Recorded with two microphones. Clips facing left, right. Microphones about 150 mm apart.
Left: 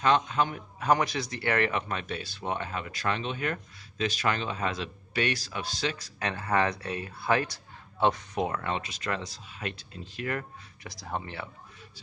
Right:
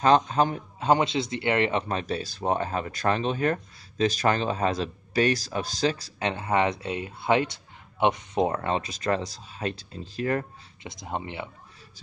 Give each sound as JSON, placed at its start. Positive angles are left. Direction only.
{"t": 0.0, "sound": "speech", "side_deg": -40}